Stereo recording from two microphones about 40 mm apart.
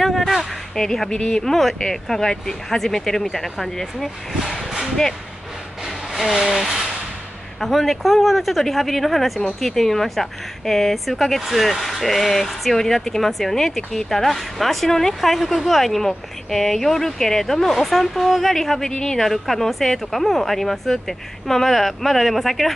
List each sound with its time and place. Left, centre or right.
0.0 s speech: centre
1.4 s speech: centre
6.5 s speech: centre
19.2 s speech: centre